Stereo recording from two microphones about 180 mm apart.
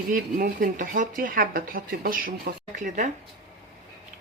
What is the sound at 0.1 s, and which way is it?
Speech, 50° right (ahead or behind).